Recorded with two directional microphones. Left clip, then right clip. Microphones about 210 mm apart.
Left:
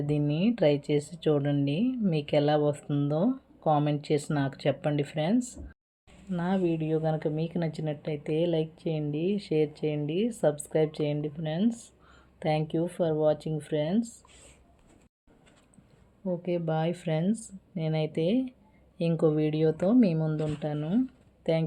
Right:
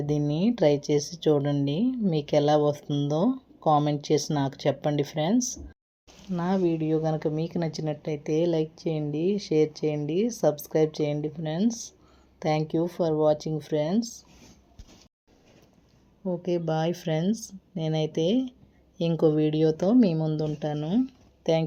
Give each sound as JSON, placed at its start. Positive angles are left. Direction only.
{"t": 0.0, "sound": "a woman's voice", "side_deg": -15}
{"t": 16.2, "sound": "a woman's voice", "side_deg": -15}